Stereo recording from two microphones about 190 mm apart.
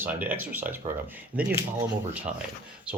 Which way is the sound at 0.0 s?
10° right (ahead or behind).